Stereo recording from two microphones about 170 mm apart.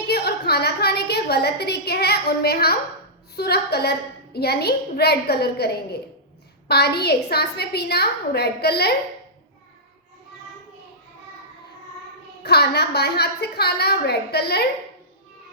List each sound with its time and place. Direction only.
0.1 s a sound: 70° left (ahead or behind)
3.3 s a woman's voice: 70° left (ahead or behind)
12.4 s a woman's voice: 70° left (ahead or behind)